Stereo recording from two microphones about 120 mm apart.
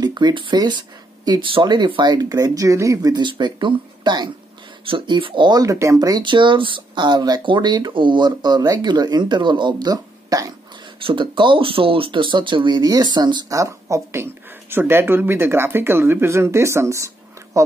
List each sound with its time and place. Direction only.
0.0 s speech: 35° right (ahead or behind)
11.0 s speech: 45° right (ahead or behind); by 17.7 s 25° right (ahead or behind)